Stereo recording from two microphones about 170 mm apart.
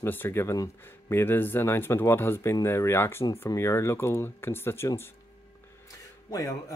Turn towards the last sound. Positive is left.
turn(degrees=20)  # may be behind; listen again after turning